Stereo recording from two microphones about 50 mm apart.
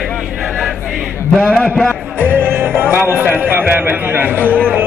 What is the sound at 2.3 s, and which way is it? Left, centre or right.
Music, right.